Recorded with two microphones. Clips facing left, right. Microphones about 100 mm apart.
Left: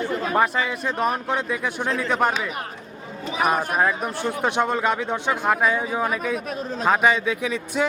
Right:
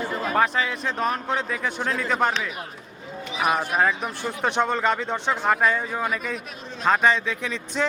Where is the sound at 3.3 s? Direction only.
45° left (ahead or behind).